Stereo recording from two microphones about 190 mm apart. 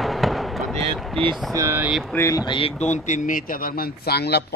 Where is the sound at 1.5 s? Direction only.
15° right (ahead or behind).